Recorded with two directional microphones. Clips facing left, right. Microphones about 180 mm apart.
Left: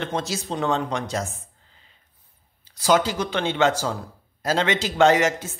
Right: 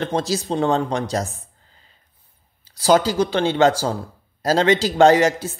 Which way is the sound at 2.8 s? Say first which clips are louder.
Right 4 dB; 35° right (ahead or behind).